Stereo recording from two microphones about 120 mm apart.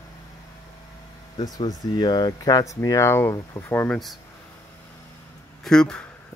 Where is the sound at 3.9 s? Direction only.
Centre (ahead or behind).